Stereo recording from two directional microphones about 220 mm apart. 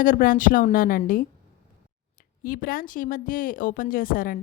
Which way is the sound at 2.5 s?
40° left (ahead or behind).